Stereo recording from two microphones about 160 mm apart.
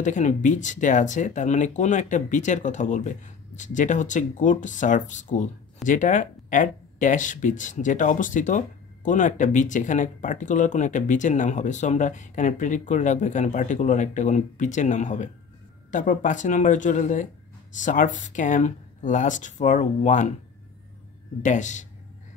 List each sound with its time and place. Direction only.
0.0 s speech: 50° left (ahead or behind)
21.4 s speech: 50° left (ahead or behind)